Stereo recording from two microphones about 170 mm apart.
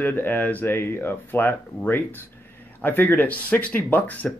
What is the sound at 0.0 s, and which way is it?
Speech, 10° left (ahead or behind).